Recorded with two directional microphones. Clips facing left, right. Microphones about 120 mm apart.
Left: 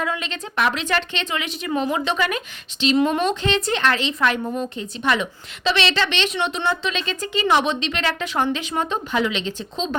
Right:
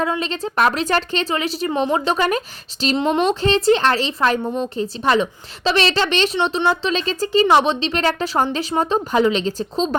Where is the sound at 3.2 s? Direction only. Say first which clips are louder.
Right 5 dB; 35° right (ahead or behind).